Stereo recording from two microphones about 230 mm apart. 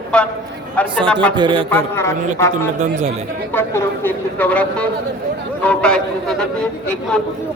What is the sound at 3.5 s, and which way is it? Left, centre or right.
A man's voice, centre.